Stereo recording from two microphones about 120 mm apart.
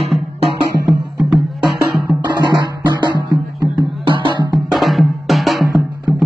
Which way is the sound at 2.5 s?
40° right (ahead or behind).